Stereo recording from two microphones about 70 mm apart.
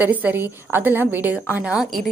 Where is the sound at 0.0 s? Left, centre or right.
Right.